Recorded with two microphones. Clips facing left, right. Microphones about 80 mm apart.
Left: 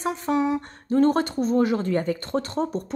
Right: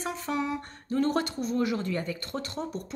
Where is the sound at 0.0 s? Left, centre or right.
Left.